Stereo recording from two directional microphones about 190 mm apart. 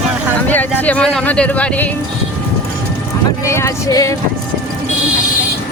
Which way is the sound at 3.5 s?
15° left (ahead or behind).